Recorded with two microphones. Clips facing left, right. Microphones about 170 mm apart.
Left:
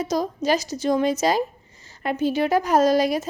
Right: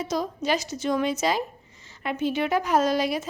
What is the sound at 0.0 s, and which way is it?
A woman's voice, 40° left (ahead or behind).